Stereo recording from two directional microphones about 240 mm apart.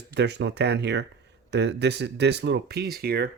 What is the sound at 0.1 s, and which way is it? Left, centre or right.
Speech, right.